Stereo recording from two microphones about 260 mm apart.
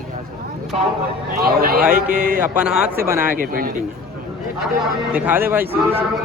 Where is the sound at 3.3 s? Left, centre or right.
Right.